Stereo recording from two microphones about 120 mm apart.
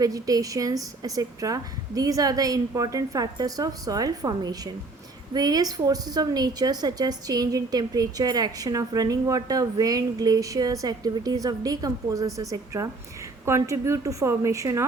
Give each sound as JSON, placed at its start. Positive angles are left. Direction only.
{"t": 0.0, "sound": "a woman's voice", "side_deg": -30}